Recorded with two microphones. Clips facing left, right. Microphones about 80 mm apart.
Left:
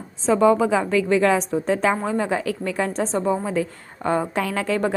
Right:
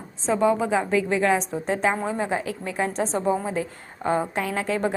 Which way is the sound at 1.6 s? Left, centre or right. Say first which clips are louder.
Left 2 dB; left.